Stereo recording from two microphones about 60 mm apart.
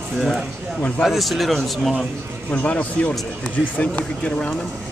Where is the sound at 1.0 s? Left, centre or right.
Centre.